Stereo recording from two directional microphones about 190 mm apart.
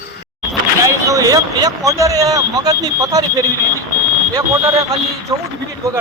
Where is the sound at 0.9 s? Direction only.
15° right (ahead or behind).